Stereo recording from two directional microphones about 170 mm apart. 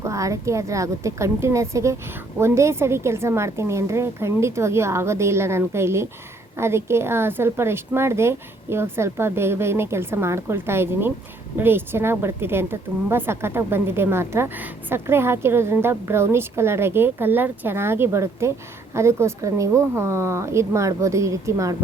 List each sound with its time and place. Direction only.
0.0 s a woman's voice: 20° right (ahead or behind)